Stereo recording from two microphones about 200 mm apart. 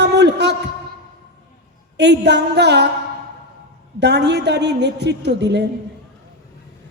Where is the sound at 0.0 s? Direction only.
55° right (ahead or behind).